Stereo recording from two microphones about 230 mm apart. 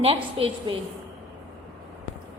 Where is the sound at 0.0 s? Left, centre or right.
Right.